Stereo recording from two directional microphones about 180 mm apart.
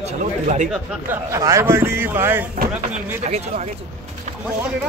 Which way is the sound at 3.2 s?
40° right (ahead or behind).